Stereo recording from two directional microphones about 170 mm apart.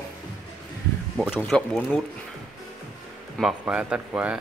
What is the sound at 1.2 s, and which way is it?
Speech, centre (ahead or behind).